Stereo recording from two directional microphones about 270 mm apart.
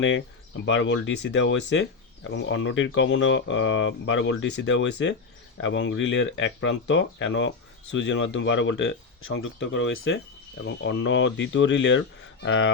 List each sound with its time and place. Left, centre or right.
0.0 s speech: left